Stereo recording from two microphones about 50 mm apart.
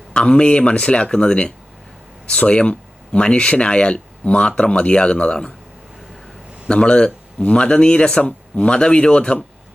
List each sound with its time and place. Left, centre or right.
0.1 s speech: centre
6.7 s speech: centre